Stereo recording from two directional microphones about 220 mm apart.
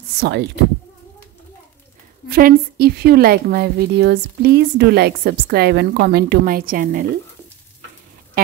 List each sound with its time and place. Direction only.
0.1 s a woman's voice: 45° right (ahead or behind)
2.2 s a woman's voice: 45° right (ahead or behind)